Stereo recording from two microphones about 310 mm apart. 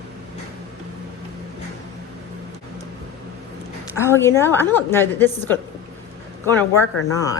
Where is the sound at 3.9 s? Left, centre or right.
Centre.